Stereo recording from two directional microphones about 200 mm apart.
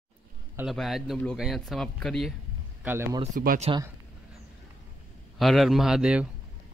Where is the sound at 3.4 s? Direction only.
45° right (ahead or behind).